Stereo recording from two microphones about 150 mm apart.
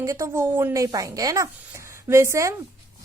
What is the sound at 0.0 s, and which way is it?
A woman's voice, 20° right (ahead or behind).